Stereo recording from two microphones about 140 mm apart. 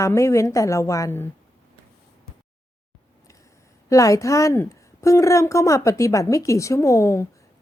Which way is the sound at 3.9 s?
25° left (ahead or behind).